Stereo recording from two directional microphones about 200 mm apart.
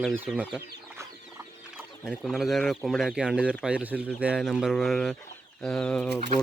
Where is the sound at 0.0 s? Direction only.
5° right (ahead or behind).